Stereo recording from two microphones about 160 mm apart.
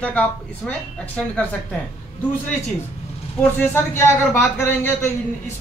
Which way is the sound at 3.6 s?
15° left (ahead or behind).